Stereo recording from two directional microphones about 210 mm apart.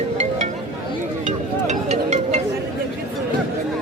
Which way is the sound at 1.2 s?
35° right (ahead or behind).